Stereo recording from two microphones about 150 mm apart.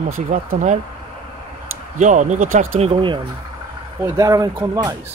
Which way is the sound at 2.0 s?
55° right (ahead or behind).